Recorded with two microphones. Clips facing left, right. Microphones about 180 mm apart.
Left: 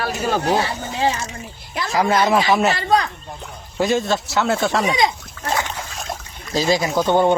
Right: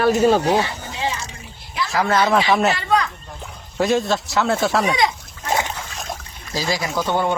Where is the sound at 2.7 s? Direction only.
35° left (ahead or behind).